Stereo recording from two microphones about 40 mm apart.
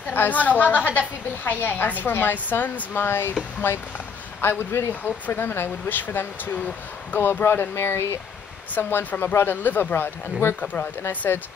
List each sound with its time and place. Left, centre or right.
0.1 s a woman's voice: left
2.1 s speech: left
2.6 s a woman's voice: left
3.1 s speech: left
4.4 s speech: left
7.2 s speech: left
9.2 s speech: left
10.6 s speech: left
11.0 s speech: left